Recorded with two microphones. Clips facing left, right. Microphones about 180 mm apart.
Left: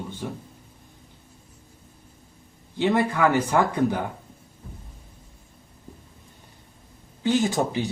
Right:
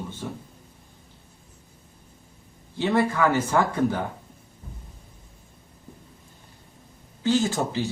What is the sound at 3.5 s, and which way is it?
Speech, 15° left (ahead or behind).